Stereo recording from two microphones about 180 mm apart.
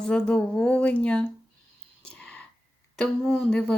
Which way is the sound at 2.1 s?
5° left (ahead or behind).